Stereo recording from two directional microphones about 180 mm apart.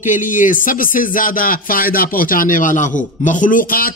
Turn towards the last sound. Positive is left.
turn(degrees=50)  # may be behind; listen again after turning